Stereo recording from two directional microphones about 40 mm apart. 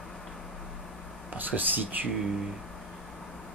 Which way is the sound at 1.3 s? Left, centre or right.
Right.